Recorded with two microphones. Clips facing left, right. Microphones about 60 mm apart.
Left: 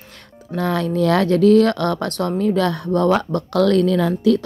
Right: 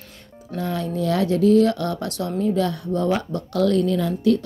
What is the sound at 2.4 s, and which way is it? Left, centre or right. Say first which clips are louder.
Speech: left 2 dB; left.